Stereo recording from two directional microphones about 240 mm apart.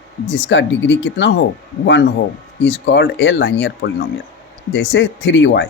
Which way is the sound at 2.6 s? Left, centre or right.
Left.